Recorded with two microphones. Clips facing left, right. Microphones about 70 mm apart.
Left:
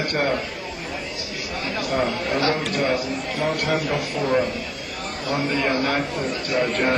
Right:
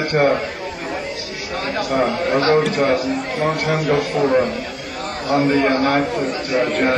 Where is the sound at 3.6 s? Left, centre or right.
Right.